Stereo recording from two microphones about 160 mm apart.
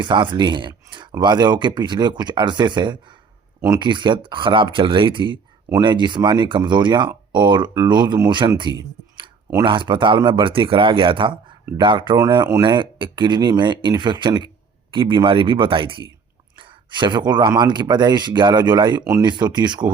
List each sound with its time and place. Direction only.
0.0 s speech: 30° right (ahead or behind)